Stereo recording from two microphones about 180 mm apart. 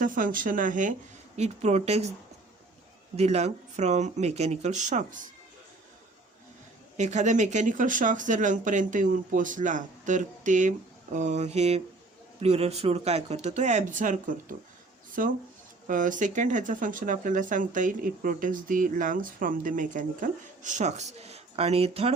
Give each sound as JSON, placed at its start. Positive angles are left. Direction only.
{"t": 0.0, "sound": "speech", "side_deg": -50}
{"t": 3.2, "sound": "speech", "side_deg": -35}
{"t": 6.9, "sound": "speech", "side_deg": -40}